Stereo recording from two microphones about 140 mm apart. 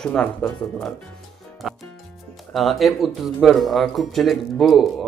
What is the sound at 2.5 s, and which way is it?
Speech, centre (ahead or behind).